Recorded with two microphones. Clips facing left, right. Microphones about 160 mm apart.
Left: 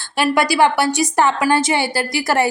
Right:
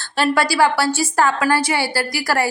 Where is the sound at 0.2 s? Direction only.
20° left (ahead or behind).